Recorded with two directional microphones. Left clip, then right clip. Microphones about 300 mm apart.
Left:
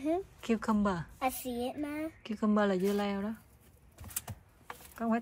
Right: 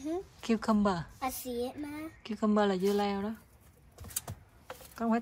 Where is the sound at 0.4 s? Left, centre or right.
Centre.